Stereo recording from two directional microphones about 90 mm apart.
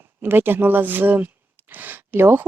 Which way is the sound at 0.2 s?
25° right (ahead or behind).